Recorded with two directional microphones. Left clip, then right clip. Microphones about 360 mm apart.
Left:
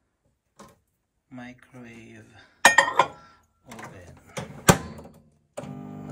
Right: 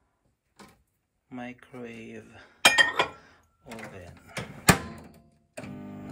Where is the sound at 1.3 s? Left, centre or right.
Centre.